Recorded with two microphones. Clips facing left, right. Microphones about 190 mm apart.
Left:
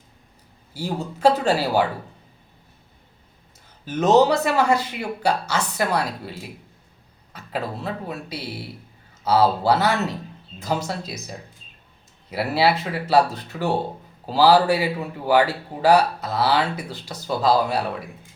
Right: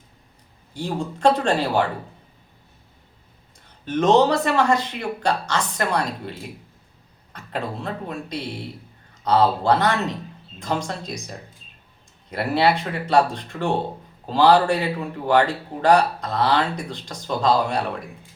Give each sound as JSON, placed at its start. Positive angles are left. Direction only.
{"t": 0.7, "sound": "speech", "side_deg": 5}
{"t": 3.8, "sound": "speech", "side_deg": 5}